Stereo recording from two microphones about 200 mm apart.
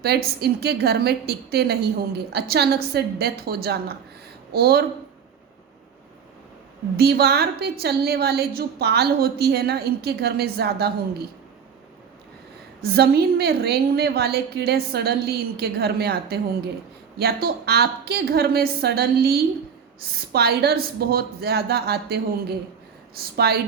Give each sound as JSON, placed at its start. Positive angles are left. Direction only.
{"t": 0.0, "sound": "a woman's voice", "side_deg": -55}
{"t": 6.9, "sound": "a woman's voice", "side_deg": -55}
{"t": 12.8, "sound": "a woman's voice", "side_deg": -50}